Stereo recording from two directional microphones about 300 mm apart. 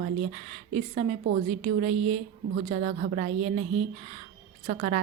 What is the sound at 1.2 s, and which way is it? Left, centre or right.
A woman's voice, right.